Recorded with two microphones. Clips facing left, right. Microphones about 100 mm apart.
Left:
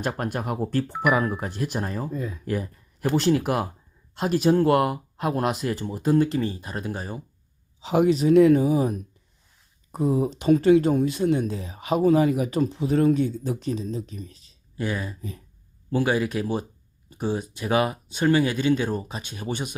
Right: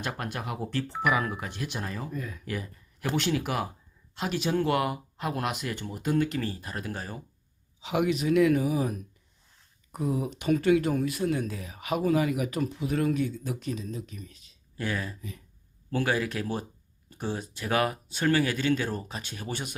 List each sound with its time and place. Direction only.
0.0 s speech: 40° left (ahead or behind)
2.5 s speech: 40° left (ahead or behind); by 7.2 s 20° left (ahead or behind)
7.8 s speech: 35° left (ahead or behind)
14.8 s speech: 15° left (ahead or behind)